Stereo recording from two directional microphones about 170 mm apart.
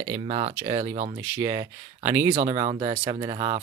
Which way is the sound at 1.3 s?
15° right (ahead or behind).